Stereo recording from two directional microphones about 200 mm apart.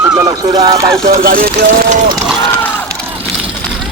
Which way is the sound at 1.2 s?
45° right (ahead or behind).